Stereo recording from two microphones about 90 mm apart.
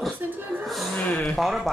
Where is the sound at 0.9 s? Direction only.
15° left (ahead or behind).